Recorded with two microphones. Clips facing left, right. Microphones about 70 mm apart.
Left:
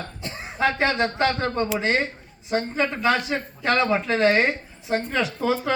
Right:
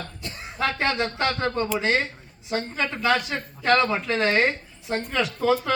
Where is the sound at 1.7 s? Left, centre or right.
Centre.